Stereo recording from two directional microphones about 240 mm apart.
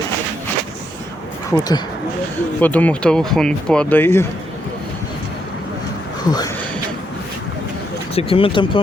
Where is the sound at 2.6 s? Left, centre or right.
Centre.